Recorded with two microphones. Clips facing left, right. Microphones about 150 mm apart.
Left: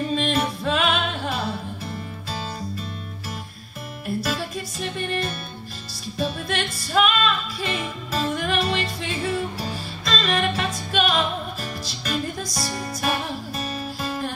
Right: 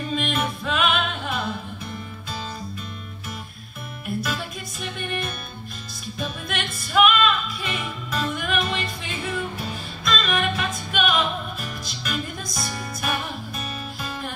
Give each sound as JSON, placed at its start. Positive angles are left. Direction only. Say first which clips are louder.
{"t": 0.1, "sound": "music", "louder": "left 3 dB", "side_deg": 30}
{"t": 4.2, "sound": "music", "louder": "left 3 dB", "side_deg": 30}